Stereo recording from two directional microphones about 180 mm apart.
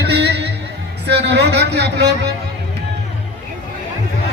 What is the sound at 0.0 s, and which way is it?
Music, 70° right (ahead or behind).